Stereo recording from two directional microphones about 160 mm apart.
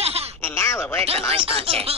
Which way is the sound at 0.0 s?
40° right (ahead or behind).